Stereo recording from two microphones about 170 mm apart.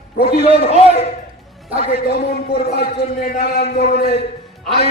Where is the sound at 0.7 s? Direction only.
35° left (ahead or behind).